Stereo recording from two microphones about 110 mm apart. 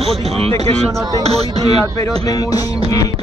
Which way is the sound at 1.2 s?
65° right (ahead or behind).